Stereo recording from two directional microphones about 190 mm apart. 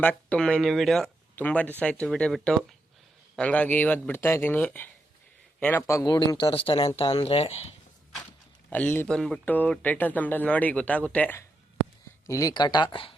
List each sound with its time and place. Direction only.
0.0 s speech: 5° left (ahead or behind); by 7.6 s 35° left (ahead or behind)
8.7 s speech: 10° left (ahead or behind); by 13.1 s 25° left (ahead or behind)